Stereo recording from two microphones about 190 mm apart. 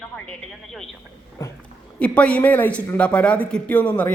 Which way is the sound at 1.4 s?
15° left (ahead or behind).